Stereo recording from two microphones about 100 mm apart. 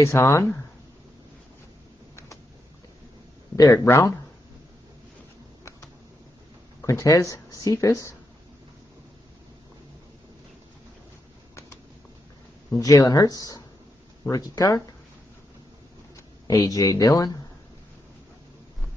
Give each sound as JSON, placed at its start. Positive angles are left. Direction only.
{"t": 0.0, "sound": "speech", "side_deg": 30}
{"t": 3.5, "sound": "speech", "side_deg": 35}
{"t": 6.9, "sound": "speech", "side_deg": 35}
{"t": 12.7, "sound": "speech", "side_deg": 35}
{"t": 16.4, "sound": "speech", "side_deg": 40}